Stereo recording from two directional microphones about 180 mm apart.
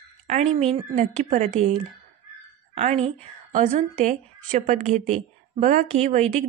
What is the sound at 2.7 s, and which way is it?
Speech, 35° right (ahead or behind).